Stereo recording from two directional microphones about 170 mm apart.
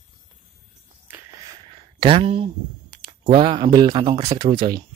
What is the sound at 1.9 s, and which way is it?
Speech, 30° right (ahead or behind).